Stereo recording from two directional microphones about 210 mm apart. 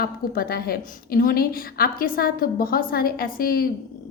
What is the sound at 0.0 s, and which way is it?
A woman's voice, 45° left (ahead or behind).